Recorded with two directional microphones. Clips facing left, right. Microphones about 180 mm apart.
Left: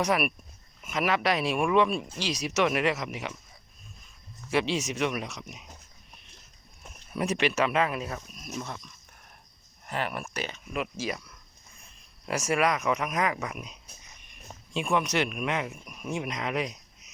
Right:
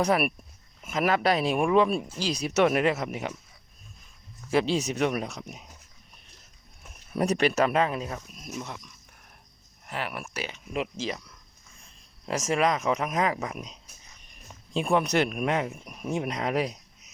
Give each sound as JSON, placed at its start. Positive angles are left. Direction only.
{"t": 0.0, "sound": "speech", "side_deg": -30}
{"t": 3.1, "sound": "speech", "side_deg": -45}
{"t": 4.5, "sound": "speech", "side_deg": -35}
{"t": 7.2, "sound": "speech", "side_deg": -40}
{"t": 8.5, "sound": "speech", "side_deg": -15}
{"t": 9.8, "sound": "speech", "side_deg": -5}
{"t": 10.7, "sound": "speech", "side_deg": -25}
{"t": 12.2, "sound": "speech", "side_deg": -25}